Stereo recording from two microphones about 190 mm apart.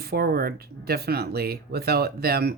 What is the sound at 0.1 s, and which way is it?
Speech, 55° right (ahead or behind).